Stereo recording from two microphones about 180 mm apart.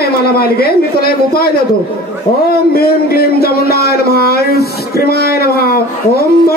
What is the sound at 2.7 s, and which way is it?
Speech, 60° left (ahead or behind).